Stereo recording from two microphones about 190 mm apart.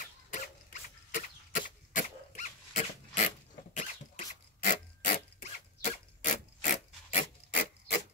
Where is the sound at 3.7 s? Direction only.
40° left (ahead or behind).